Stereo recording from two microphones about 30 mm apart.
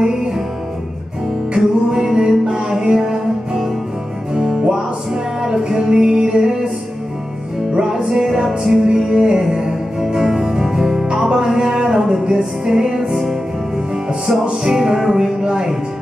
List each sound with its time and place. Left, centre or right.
1.6 s music: centre
4.3 s music: right
7.7 s music: right
8.5 s music: centre; by 11.1 s right
11.2 s a sound: right
12.6 s music: centre
14.6 s music: centre
15.4 s speech: right